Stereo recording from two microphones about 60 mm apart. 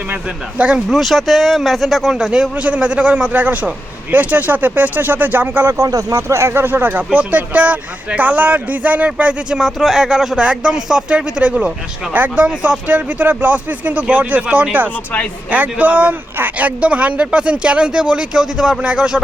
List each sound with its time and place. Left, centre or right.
0.9 s speech: centre
2.6 s speech: right
5.7 s speech: right; by 19.2 s centre